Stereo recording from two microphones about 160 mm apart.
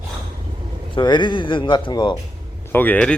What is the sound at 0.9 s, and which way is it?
Speech, 30° left (ahead or behind).